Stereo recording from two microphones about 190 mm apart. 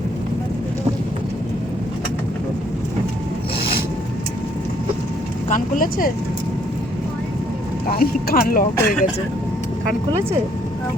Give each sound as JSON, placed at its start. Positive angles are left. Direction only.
{"t": 5.5, "sound": "speech", "side_deg": 45}
{"t": 7.9, "sound": "speech", "side_deg": 50}